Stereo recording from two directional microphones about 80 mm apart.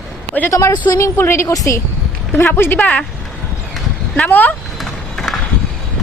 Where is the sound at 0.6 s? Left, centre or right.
Left.